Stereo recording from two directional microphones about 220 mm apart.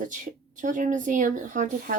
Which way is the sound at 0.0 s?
35° right (ahead or behind).